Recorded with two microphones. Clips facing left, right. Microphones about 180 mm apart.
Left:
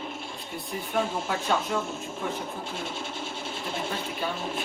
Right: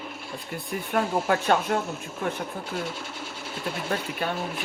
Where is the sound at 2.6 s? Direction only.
25° left (ahead or behind).